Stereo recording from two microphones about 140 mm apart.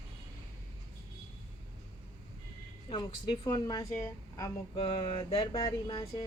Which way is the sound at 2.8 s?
35° left (ahead or behind).